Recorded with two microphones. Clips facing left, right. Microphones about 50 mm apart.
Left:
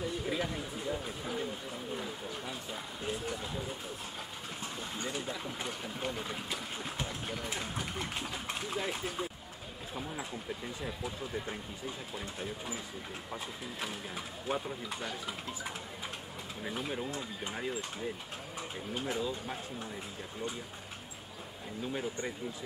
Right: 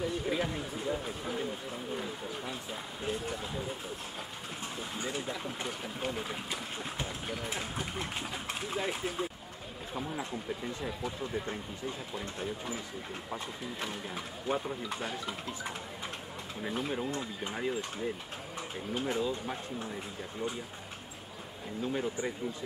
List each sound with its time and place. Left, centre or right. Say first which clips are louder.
0.0 s speech: right 2 dB; centre
4.9 s speech: right 2 dB; centre
16.6 s speech: right 3 dB; centre
21.8 s speech: right 3 dB; centre